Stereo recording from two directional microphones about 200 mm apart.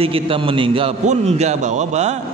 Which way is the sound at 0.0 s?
25° right (ahead or behind).